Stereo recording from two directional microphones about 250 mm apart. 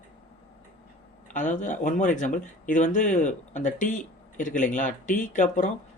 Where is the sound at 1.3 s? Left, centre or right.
Left.